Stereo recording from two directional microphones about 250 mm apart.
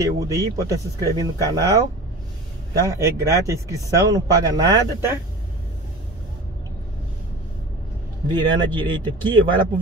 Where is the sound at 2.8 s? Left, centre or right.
Centre.